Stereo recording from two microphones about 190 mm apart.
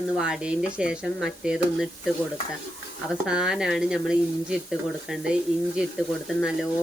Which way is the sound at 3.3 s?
5° right (ahead or behind).